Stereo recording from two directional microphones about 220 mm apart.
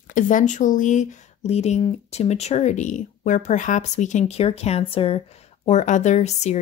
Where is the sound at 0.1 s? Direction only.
35° left (ahead or behind).